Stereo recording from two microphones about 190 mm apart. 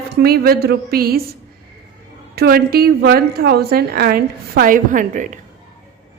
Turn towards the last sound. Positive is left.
turn(degrees=-40)  # may be behind; listen again after turning